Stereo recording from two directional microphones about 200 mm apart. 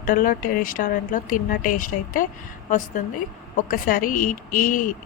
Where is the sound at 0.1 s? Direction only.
40° left (ahead or behind).